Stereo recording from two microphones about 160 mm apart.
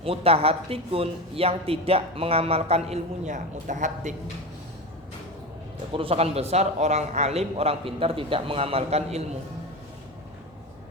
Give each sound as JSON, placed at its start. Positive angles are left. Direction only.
{"t": 0.0, "sound": "speech", "side_deg": -40}
{"t": 5.9, "sound": "speech", "side_deg": -35}